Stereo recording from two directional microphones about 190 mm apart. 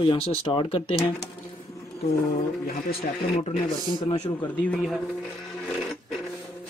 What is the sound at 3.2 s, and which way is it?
Speech, 30° left (ahead or behind).